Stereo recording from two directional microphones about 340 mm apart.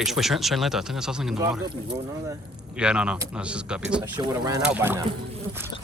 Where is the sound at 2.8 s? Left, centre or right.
Centre.